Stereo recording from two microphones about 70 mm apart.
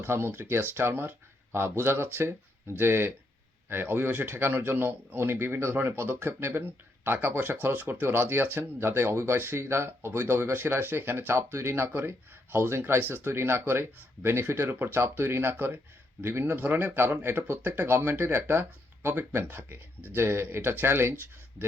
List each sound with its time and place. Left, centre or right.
0.0 s speech: right
20.1 s speech: right